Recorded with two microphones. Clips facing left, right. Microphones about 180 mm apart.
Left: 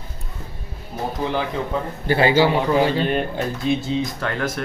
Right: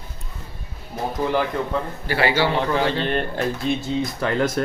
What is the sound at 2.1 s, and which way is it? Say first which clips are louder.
Speech: left 4 dB; 20° left (ahead or behind).